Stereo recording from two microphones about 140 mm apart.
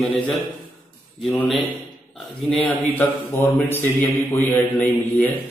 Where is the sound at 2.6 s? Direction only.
10° left (ahead or behind).